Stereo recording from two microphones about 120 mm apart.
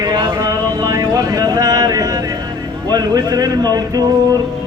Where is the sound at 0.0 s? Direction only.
35° right (ahead or behind).